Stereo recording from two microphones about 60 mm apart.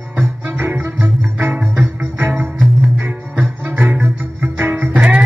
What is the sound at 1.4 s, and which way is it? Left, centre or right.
Music, right.